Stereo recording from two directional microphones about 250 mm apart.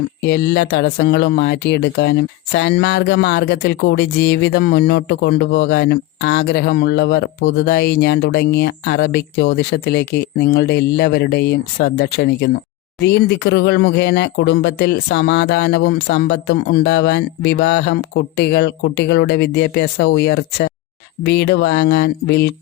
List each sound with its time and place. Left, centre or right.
0.3 s speech: left